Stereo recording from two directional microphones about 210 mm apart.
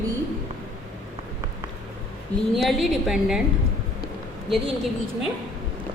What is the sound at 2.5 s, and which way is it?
Speech, centre (ahead or behind).